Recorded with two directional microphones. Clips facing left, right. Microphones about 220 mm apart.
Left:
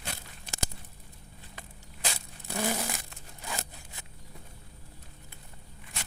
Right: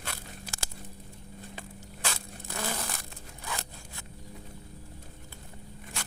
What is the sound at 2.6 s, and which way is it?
Crumpling, 15° left (ahead or behind).